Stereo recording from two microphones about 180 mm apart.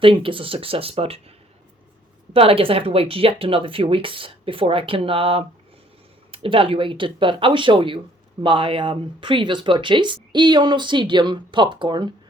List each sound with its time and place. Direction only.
0.0 s speech: 30° right (ahead or behind)
2.3 s speech: 30° right (ahead or behind)